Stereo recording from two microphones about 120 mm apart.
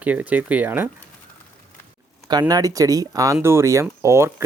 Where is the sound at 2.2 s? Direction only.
35° right (ahead or behind).